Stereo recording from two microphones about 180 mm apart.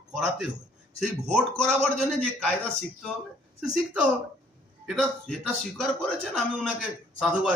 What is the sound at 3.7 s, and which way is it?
A man's voice, 5° right (ahead or behind).